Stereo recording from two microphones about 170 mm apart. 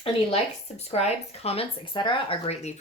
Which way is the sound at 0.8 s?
40° left (ahead or behind).